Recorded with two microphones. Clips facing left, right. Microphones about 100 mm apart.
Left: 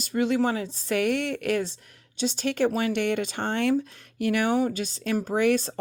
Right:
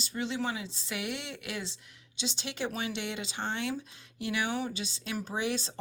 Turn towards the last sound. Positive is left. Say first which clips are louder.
# left 10 dB
turn(degrees=55)  # may be behind; listen again after turning